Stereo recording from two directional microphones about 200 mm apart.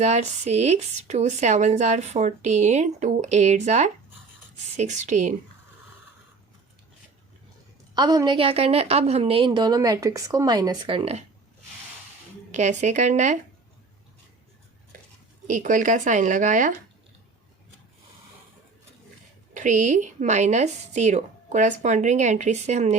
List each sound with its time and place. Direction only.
0.0 s speech: 35° right (ahead or behind)
7.9 s a woman's voice: 20° right (ahead or behind)
12.5 s speech: 35° right (ahead or behind)
15.4 s speech: 40° right (ahead or behind)
19.5 s speech: 40° right (ahead or behind)